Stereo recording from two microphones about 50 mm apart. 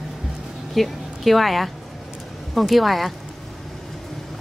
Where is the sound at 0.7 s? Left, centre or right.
Centre.